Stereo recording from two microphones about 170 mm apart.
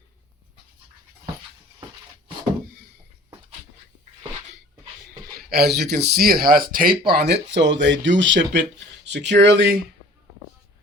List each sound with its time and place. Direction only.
5.5 s speech: 70° right (ahead or behind)